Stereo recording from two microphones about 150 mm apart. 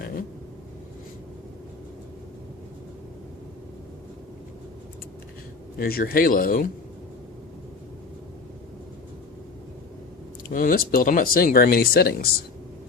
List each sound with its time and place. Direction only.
0.0 s vehicle: 75° left (ahead or behind)
5.8 s speech: 75° left (ahead or behind)
10.5 s speech: 70° left (ahead or behind); by 12.3 s 85° left